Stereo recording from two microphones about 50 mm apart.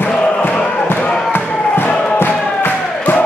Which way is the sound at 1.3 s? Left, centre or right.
Left.